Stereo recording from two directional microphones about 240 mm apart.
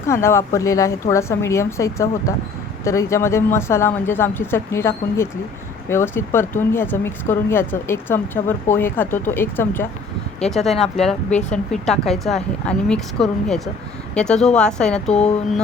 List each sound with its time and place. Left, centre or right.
0.1 s a woman's voice: centre
11.3 s speech: left
11.5 s a woman's voice: centre